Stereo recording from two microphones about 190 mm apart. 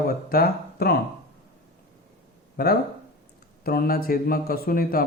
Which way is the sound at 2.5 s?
50° left (ahead or behind).